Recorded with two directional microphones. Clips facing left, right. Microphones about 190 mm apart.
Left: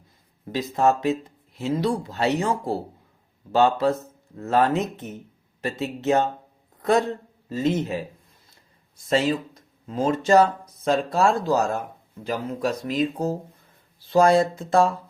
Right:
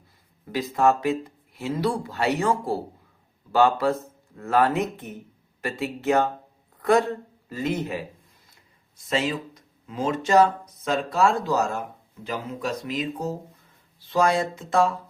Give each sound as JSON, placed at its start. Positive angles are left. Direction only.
{"t": 0.5, "sound": "speech", "side_deg": 25}
{"t": 7.5, "sound": "speech", "side_deg": 25}
{"t": 9.0, "sound": "speech", "side_deg": 35}
{"t": 12.2, "sound": "speech", "side_deg": 45}